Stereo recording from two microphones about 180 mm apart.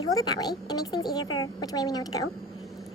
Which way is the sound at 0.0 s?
20° left (ahead or behind).